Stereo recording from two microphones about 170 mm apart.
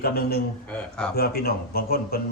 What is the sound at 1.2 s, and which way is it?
Speech, 65° left (ahead or behind).